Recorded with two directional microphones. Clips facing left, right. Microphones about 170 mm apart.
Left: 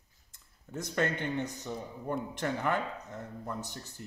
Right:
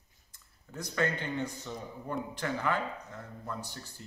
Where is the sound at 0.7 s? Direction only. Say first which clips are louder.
Left 1 dB; 20° left (ahead or behind).